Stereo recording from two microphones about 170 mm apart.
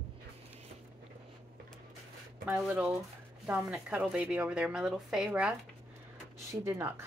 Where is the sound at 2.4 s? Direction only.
5° right (ahead or behind).